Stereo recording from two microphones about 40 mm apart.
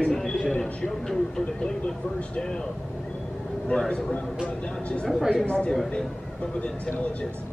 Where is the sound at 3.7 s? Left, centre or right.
Left.